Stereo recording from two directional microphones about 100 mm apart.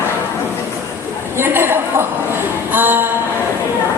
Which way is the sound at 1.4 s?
25° right (ahead or behind).